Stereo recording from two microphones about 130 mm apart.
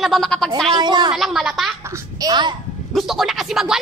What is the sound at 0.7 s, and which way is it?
Speech, 30° right (ahead or behind).